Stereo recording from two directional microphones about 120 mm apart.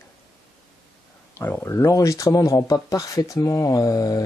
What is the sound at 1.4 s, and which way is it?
Speech, 20° left (ahead or behind).